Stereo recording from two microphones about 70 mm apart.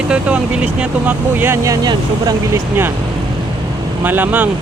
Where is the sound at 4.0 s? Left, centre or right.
Right.